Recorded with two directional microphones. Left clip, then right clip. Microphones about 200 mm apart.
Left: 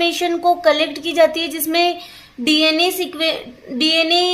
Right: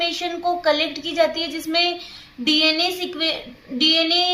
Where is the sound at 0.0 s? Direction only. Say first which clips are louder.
Left 6 dB; 35° left (ahead or behind).